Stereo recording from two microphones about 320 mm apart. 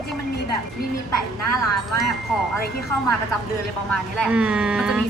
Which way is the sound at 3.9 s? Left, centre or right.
Centre.